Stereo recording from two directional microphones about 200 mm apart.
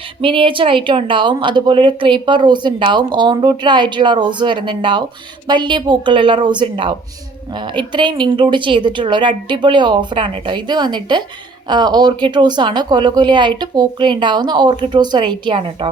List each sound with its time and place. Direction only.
0.2 s a woman's voice: 25° right (ahead or behind)